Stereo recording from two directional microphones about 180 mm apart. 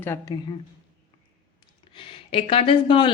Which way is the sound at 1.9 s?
30° left (ahead or behind).